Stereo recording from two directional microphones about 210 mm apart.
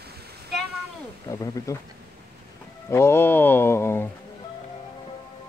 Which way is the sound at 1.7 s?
15° left (ahead or behind).